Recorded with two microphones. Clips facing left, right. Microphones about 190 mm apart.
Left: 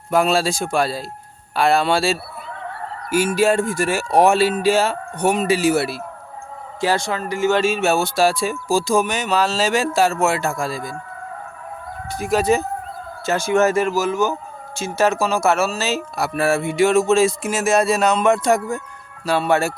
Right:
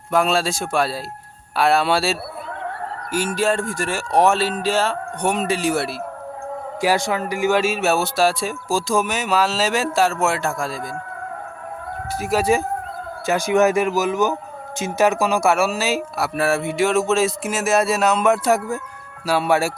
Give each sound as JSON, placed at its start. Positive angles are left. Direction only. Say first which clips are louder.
{"t": 0.1, "sound": "speech", "louder": "left 2 dB", "side_deg": 0}
{"t": 3.1, "sound": "speech", "louder": "left 4 dB", "side_deg": 10}
{"t": 6.8, "sound": "speech", "louder": "right 1 dB", "side_deg": -15}
{"t": 12.1, "sound": "speech", "louder": "left 1 dB", "side_deg": -5}